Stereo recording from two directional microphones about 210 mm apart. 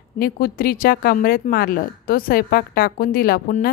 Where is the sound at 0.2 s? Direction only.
45° left (ahead or behind).